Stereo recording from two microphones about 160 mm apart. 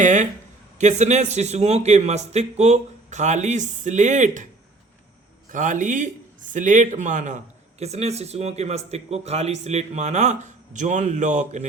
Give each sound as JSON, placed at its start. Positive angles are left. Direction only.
{"t": 0.0, "sound": "a man's voice", "side_deg": -50}
{"t": 5.5, "sound": "a man's voice", "side_deg": -55}